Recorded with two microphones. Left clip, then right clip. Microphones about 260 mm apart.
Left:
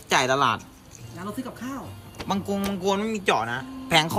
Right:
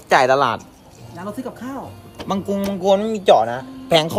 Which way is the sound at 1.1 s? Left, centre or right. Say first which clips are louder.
Right 5 dB; centre.